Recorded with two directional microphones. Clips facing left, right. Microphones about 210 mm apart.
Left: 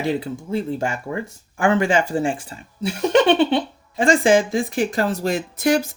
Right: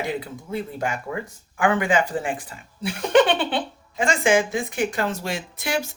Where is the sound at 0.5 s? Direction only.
30° left (ahead or behind).